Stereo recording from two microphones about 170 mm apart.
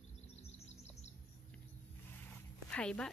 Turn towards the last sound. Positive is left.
turn(degrees=5)  # may be behind; listen again after turning